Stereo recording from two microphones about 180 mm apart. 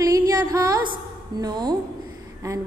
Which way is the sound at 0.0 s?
20° right (ahead or behind).